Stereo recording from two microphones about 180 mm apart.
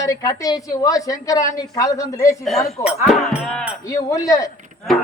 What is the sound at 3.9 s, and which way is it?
Speech, 15° left (ahead or behind).